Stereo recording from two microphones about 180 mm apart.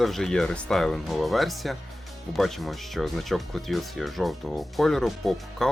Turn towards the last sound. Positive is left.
turn(degrees=0)  # may be behind; listen again after turning